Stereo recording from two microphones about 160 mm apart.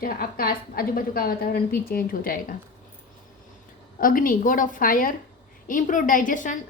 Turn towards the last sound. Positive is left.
turn(degrees=55)  # may be behind; listen again after turning